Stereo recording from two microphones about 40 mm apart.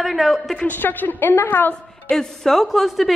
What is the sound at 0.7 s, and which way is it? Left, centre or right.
A woman's voice, left.